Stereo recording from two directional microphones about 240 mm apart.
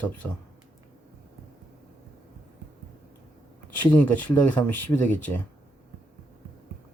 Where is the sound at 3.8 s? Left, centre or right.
Centre.